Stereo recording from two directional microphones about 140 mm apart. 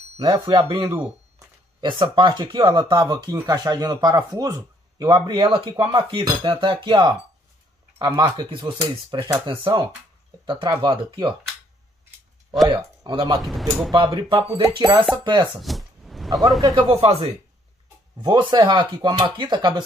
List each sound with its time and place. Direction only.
0.2 s a man's voice: 30° right (ahead or behind)
3.0 s a man's voice: 25° right (ahead or behind)
12.6 s speech: 30° right (ahead or behind)
13.4 s speech: centre (ahead or behind)
13.9 s a man's voice: 35° right (ahead or behind)
15.6 s a sound: centre (ahead or behind)
16.9 s speech: 45° right (ahead or behind)
18.2 s a man's voice: 30° right (ahead or behind)